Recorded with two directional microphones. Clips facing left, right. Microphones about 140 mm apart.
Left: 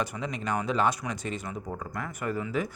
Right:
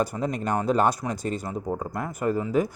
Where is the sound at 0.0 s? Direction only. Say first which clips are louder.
Right 6 dB; 40° right (ahead or behind).